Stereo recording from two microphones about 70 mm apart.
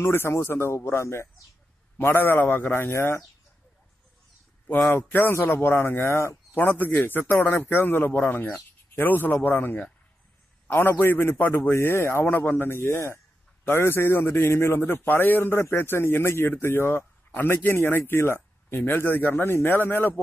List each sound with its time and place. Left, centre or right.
0.0 s speech: left
5.1 s speech: left
6.5 s speech: left